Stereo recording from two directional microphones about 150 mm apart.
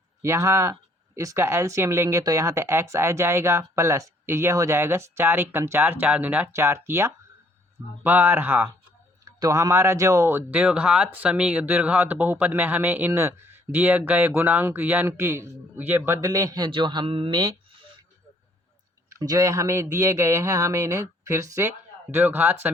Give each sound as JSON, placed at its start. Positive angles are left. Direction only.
{"t": 0.2, "sound": "speech", "side_deg": -20}
{"t": 19.1, "sound": "speech", "side_deg": -25}